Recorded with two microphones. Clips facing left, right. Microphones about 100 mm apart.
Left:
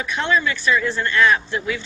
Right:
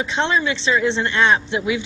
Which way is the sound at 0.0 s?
25° right (ahead or behind).